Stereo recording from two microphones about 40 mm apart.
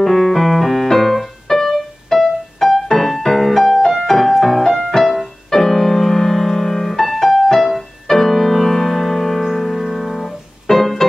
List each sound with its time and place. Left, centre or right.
0.0 s keyboard: centre
8.1 s music: centre